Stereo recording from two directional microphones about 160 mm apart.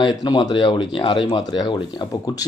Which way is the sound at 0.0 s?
30° left (ahead or behind).